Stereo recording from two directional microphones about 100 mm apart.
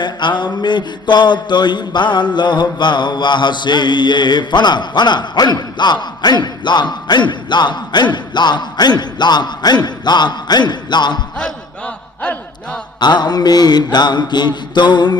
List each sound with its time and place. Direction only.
0.0 s mantra: 50° left (ahead or behind)
13.0 s mantra: 45° left (ahead or behind)